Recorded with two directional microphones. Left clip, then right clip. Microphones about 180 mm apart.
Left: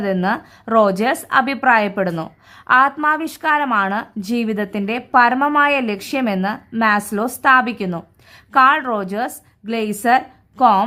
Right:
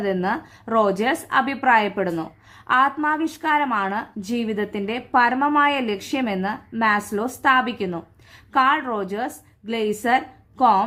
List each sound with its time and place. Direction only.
0.0 s a woman's voice: 30° left (ahead or behind)